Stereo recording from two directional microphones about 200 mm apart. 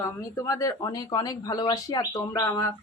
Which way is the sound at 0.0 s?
15° left (ahead or behind).